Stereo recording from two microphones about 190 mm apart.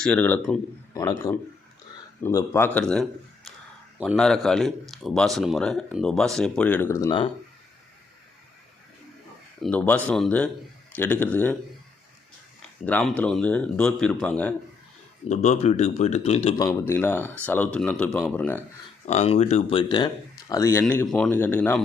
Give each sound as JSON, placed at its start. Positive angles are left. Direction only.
{"t": 0.0, "sound": "a man's voice", "side_deg": 5}
{"t": 9.6, "sound": "speech", "side_deg": 5}
{"t": 12.8, "sound": "speech", "side_deg": 5}
{"t": 15.3, "sound": "speech", "side_deg": 35}
{"t": 16.6, "sound": "speech", "side_deg": 15}
{"t": 19.0, "sound": "speech", "side_deg": 35}
{"t": 19.9, "sound": "speech", "side_deg": 20}